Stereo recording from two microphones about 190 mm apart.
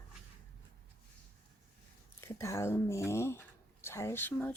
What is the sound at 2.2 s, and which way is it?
Speech, 15° left (ahead or behind).